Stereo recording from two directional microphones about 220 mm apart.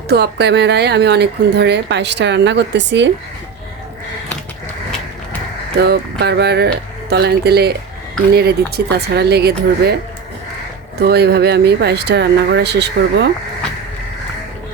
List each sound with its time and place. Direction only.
0.1 s speech: 50° right (ahead or behind)
5.7 s speech: 45° right (ahead or behind)
11.0 s speech: 45° right (ahead or behind)